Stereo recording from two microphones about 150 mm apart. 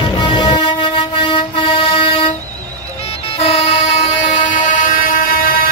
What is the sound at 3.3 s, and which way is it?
Vehicle, 40° left (ahead or behind).